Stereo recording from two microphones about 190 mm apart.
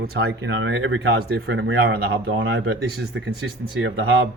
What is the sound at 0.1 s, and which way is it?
Speech, 60° right (ahead or behind).